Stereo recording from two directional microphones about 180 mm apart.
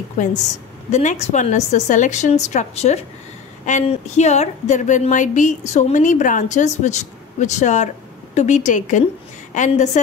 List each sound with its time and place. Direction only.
0.9 s a woman's voice: 40° left (ahead or behind)